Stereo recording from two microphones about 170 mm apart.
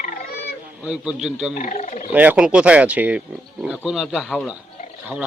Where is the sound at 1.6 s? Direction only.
45° left (ahead or behind).